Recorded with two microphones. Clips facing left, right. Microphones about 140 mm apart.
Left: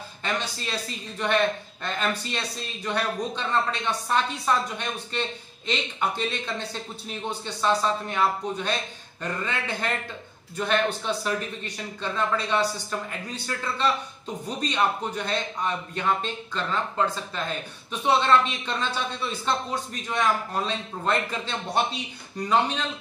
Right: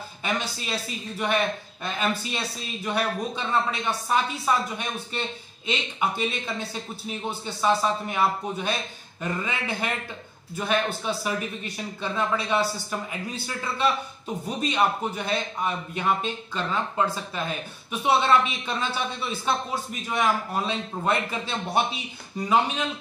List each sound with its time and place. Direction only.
0.2 s a man's voice: 10° right (ahead or behind)